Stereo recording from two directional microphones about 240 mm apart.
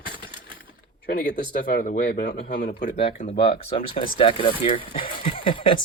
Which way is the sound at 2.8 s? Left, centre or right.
Left.